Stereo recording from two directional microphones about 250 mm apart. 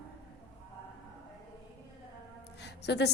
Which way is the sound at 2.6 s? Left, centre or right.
Left.